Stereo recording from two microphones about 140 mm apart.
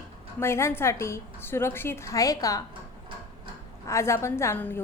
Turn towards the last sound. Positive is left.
turn(degrees=15)  # may be behind; listen again after turning